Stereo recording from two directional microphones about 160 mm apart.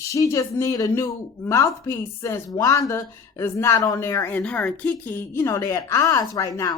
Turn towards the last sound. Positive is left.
turn(degrees=20)  # may be behind; listen again after turning